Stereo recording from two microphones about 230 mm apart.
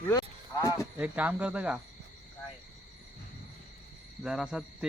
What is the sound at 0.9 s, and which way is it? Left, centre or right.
Speech, centre.